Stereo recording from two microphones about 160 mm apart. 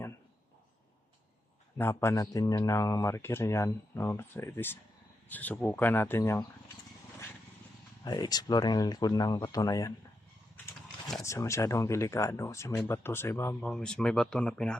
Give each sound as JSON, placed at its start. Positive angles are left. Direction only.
{"t": 1.8, "sound": "speech", "side_deg": 15}
{"t": 8.0, "sound": "speech", "side_deg": 25}
{"t": 11.2, "sound": "speech", "side_deg": 20}
{"t": 13.6, "sound": "speech", "side_deg": 5}